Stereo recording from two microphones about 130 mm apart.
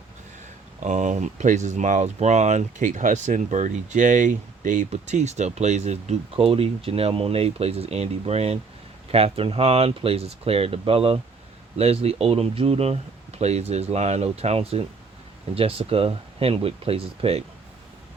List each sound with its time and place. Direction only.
0.8 s speech: 65° right (ahead or behind); by 4.9 s 85° right
4.9 s speech: 60° right (ahead or behind)